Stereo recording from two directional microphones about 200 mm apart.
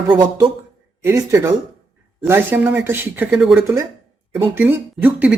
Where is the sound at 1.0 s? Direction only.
15° right (ahead or behind).